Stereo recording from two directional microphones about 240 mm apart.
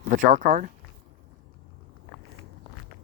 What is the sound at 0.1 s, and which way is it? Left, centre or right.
Speech, right.